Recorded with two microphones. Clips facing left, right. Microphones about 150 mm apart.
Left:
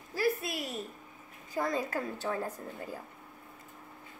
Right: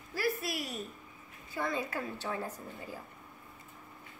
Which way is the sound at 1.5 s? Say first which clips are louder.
Left 3 dB; 40° left (ahead or behind).